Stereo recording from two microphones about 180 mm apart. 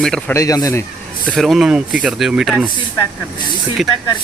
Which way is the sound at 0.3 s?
20° left (ahead or behind).